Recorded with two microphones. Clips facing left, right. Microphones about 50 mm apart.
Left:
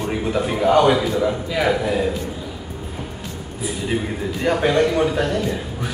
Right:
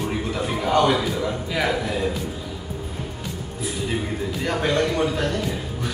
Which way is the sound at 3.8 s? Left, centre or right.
Centre.